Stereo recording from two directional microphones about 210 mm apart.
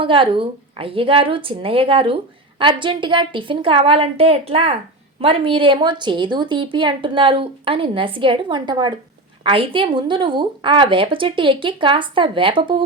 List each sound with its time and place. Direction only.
0.0 s a woman's voice: 25° right (ahead or behind)